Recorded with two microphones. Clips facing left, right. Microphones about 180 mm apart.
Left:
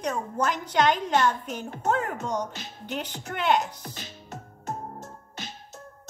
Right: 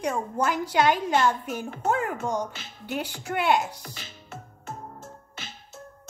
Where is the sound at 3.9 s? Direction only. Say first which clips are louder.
Left 2 dB; 40° left (ahead or behind).